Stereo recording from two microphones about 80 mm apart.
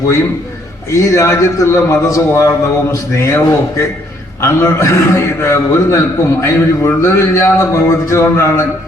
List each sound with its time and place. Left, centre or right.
0.9 s speech: left